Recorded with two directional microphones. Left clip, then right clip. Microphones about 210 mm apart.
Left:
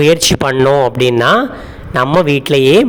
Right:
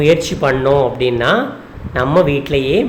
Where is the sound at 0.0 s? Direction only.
55° left (ahead or behind).